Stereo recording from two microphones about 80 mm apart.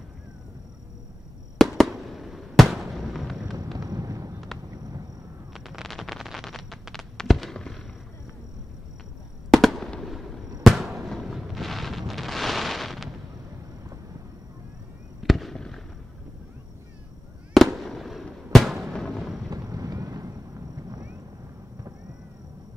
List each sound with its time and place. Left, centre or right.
1.6 s fireworks: centre
3.7 s a sound: right
5.5 s a sound: centre
9.5 s fireworks: centre
15.2 s fireworks: centre
17.6 s fireworks: centre
18.9 s music: centre
19.5 s vehicle: right